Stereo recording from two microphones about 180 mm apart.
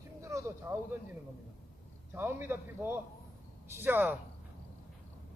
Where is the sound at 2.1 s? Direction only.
10° right (ahead or behind).